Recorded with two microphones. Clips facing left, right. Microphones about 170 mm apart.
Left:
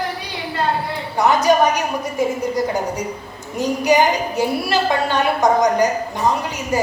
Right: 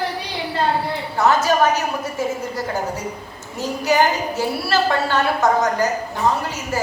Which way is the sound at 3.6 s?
15° left (ahead or behind).